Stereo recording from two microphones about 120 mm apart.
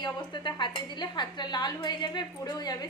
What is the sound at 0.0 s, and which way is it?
A woman's voice, 35° left (ahead or behind).